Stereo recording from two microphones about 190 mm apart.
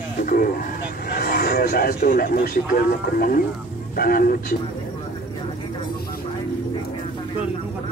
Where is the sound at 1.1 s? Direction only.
55° left (ahead or behind).